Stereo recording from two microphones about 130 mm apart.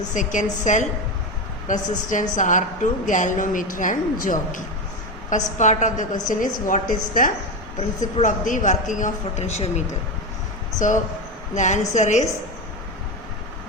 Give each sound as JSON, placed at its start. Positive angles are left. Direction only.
{"t": 0.1, "sound": "a woman's voice", "side_deg": 75}
{"t": 5.3, "sound": "speech", "side_deg": 70}
{"t": 6.2, "sound": "a woman's voice", "side_deg": 90}
{"t": 7.8, "sound": "speech", "side_deg": 75}
{"t": 10.8, "sound": "speech", "side_deg": 75}